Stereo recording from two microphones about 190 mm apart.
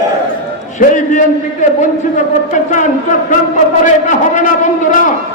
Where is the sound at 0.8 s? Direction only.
40° left (ahead or behind).